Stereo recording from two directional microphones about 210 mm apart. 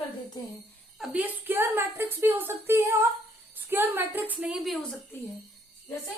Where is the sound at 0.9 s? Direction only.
5° right (ahead or behind).